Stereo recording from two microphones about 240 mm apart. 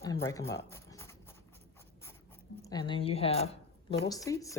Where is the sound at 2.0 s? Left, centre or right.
Centre.